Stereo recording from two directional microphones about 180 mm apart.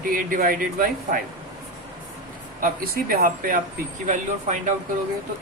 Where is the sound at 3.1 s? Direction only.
50° right (ahead or behind).